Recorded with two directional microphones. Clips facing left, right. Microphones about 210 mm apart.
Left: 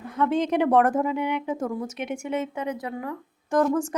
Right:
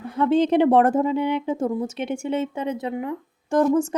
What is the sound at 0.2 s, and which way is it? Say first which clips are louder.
A woman's voice: right 5 dB; 30° right (ahead or behind).